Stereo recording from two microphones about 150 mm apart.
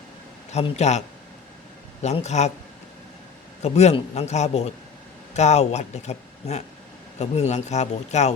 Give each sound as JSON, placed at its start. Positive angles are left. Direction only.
{"t": 0.5, "sound": "speech", "side_deg": 50}
{"t": 3.6, "sound": "speech", "side_deg": 45}